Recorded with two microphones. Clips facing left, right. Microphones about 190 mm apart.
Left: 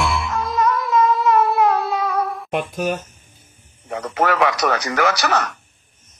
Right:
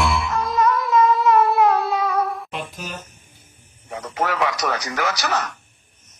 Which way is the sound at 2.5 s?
55° left (ahead or behind).